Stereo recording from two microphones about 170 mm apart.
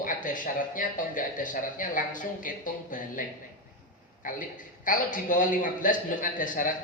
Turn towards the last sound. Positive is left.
turn(degrees=50)  # may be behind; listen again after turning